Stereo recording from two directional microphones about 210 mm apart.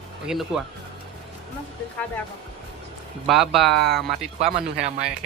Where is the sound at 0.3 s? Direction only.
5° right (ahead or behind).